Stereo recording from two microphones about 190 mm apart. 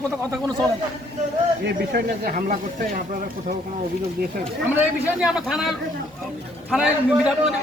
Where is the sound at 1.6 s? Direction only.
55° right (ahead or behind).